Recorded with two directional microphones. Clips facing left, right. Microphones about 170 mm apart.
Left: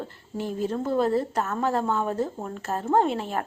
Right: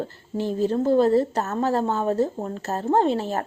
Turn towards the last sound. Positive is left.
turn(degrees=-35)  # may be behind; listen again after turning